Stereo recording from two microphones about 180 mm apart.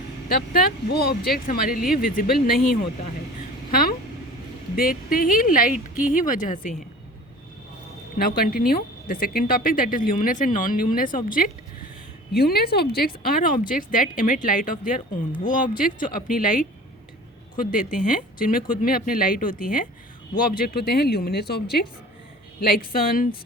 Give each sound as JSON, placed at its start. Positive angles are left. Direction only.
{"t": 0.3, "sound": "speech", "side_deg": 55}
{"t": 3.7, "sound": "speech", "side_deg": 55}
{"t": 8.2, "sound": "speech", "side_deg": 55}
{"t": 12.3, "sound": "speech", "side_deg": 60}